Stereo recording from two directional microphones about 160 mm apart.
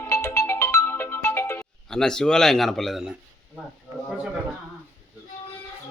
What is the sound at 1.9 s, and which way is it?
Speech, 5° left (ahead or behind).